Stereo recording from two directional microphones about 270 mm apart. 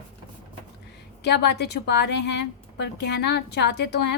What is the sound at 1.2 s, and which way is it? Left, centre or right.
A woman's voice, left.